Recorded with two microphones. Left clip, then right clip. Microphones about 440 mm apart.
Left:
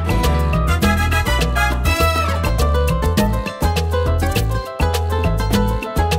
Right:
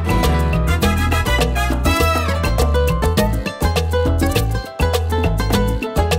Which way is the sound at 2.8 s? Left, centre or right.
Right.